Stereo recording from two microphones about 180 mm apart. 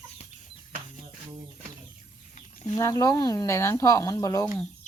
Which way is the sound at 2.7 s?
20° left (ahead or behind).